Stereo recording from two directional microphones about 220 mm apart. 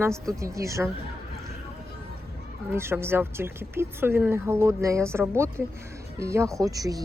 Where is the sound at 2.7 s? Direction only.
10° right (ahead or behind).